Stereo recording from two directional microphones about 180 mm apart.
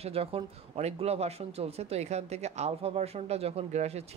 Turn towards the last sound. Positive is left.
turn(degrees=-35)  # may be behind; listen again after turning